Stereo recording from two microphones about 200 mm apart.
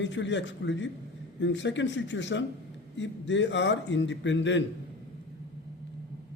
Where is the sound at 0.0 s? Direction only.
65° left (ahead or behind).